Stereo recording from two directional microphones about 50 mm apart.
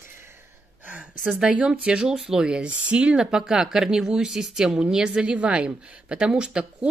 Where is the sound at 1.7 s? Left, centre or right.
Centre.